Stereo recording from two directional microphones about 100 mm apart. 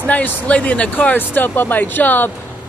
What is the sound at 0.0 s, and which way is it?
Speech, 15° left (ahead or behind).